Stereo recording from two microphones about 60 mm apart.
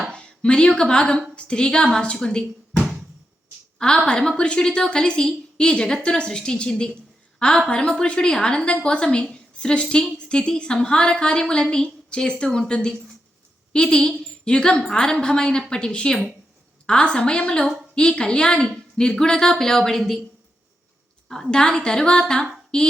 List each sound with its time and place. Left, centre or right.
0.1 s a sound: centre
0.8 s a woman's voice: centre
3.8 s a woman's voice: centre
21.2 s a woman's voice: centre